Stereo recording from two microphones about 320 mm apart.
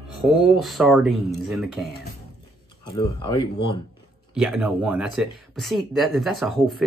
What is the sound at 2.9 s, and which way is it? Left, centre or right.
Speech, centre.